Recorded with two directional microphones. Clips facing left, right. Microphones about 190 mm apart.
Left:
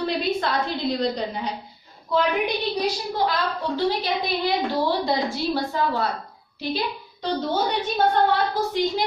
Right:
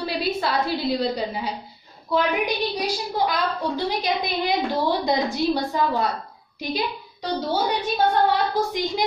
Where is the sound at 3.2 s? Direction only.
15° right (ahead or behind).